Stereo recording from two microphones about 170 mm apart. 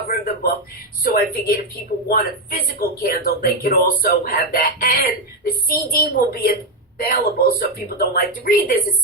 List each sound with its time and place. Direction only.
0.1 s a man's voice: 70° left (ahead or behind)